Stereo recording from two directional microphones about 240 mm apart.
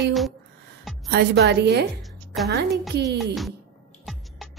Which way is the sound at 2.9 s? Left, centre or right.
Right.